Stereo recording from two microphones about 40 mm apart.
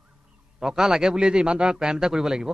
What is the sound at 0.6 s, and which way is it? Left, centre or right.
Speech, centre.